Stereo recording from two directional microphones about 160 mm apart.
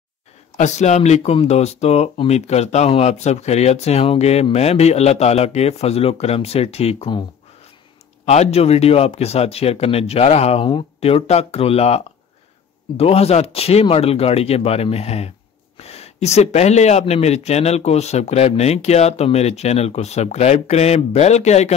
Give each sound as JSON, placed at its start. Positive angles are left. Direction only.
{"t": 0.6, "sound": "speech", "side_deg": 45}
{"t": 8.3, "sound": "speech", "side_deg": 40}